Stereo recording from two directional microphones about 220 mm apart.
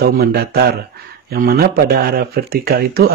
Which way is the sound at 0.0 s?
45° right (ahead or behind).